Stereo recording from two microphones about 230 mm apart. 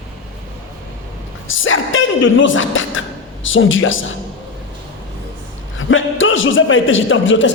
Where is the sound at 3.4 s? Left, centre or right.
Left.